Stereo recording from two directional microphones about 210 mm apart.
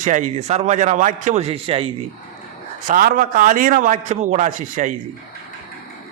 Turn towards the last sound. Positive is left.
turn(degrees=-35)  # may be behind; listen again after turning